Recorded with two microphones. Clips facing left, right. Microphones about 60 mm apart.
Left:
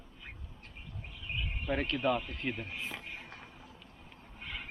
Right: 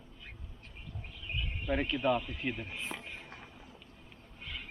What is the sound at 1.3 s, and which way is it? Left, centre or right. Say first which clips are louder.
Speech: even; centre.